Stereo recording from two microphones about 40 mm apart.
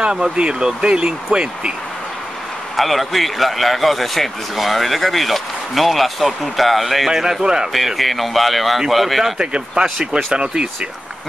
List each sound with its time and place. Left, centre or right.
0.0 s speech: right
2.7 s a man's voice: centre
7.7 s a man's voice: centre
9.4 s speech: right